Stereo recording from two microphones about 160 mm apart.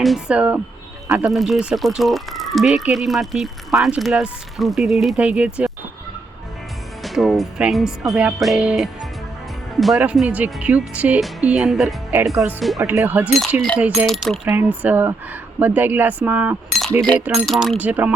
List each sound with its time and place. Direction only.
0.0 s speech: 5° right (ahead or behind)
7.0 s speech: centre (ahead or behind)
12.1 s speech: 20° right (ahead or behind)
12.4 s speech: centre (ahead or behind)
12.8 s speech: 15° right (ahead or behind)
13.3 s speech: centre (ahead or behind)
14.4 s speech: 10° right (ahead or behind)
17.2 s speech: centre (ahead or behind)